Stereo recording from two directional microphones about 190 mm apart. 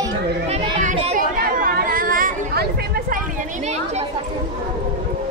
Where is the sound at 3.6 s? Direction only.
35° right (ahead or behind).